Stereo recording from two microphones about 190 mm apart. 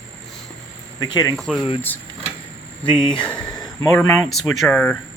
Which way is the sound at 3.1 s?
5° left (ahead or behind).